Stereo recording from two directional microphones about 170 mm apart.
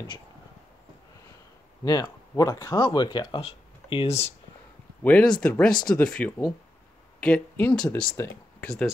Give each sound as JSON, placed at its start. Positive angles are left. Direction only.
{"t": 1.9, "sound": "speech", "side_deg": 20}
{"t": 5.0, "sound": "speech", "side_deg": 10}